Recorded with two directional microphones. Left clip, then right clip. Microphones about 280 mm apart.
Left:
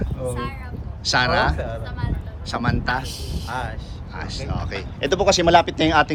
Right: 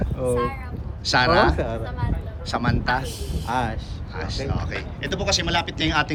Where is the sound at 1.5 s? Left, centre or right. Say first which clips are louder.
Right 3 dB; right.